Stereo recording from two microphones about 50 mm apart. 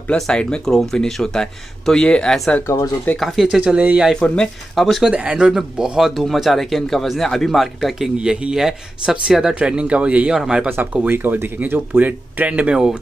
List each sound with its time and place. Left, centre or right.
0.1 s speech: centre
3.2 s speech: centre
3.4 s speech: centre
4.1 s speech: centre
4.7 s speech: centre
5.1 s speech: right
5.5 s speech: centre
8.2 s speech: centre
10.3 s speech: centre
10.7 s speech: right
11.1 s speech: right
12.7 s speech: centre